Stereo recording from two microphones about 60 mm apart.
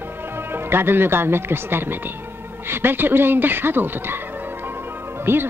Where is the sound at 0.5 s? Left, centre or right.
Right.